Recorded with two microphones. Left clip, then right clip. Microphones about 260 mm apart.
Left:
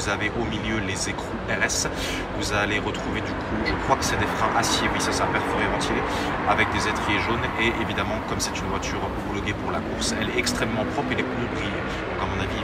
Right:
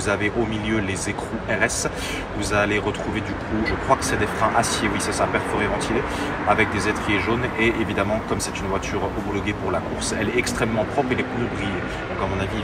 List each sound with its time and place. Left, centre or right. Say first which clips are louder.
0.1 s speech: right 4 dB; centre
2.5 s speech: right 4 dB; centre
3.9 s speech: right 3 dB; centre
6.5 s speech: right 3 dB; centre
10.3 s speech: right 2 dB; centre